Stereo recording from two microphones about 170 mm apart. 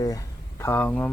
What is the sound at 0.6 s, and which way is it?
Speech, 10° left (ahead or behind).